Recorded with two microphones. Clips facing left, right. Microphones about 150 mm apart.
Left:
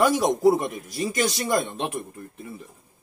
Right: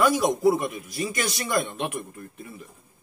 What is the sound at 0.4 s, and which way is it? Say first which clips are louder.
Speech: left 2 dB; 35° left (ahead or behind).